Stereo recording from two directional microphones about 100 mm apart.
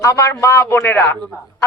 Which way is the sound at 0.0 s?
30° left (ahead or behind).